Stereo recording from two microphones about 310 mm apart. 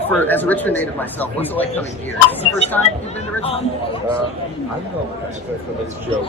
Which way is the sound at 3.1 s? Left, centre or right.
Centre.